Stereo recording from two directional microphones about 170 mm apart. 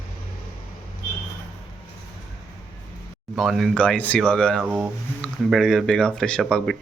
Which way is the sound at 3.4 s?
Centre (ahead or behind).